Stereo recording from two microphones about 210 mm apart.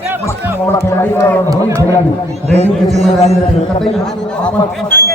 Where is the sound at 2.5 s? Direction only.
30° right (ahead or behind).